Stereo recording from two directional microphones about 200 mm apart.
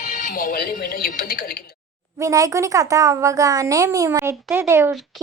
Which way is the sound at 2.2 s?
15° right (ahead or behind).